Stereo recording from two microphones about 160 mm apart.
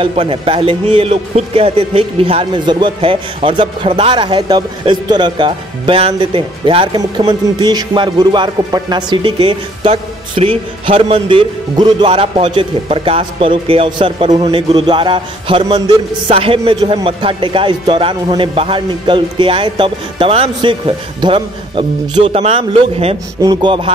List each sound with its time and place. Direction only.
0.0 s speech: 35° right (ahead or behind)
23.4 s speech: 25° right (ahead or behind)